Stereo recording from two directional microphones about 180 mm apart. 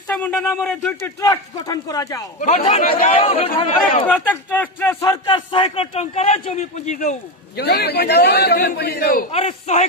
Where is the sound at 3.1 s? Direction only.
30° left (ahead or behind).